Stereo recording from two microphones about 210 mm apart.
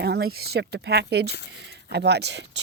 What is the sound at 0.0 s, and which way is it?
Speech, 50° right (ahead or behind).